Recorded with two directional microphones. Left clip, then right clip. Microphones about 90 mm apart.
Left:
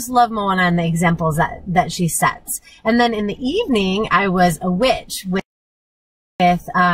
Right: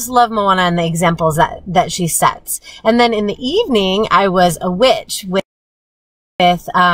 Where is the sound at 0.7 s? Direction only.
15° right (ahead or behind).